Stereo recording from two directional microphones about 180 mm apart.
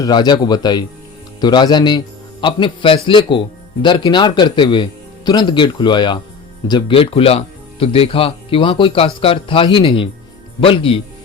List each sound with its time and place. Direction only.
0.0 s speech: 20° left (ahead or behind)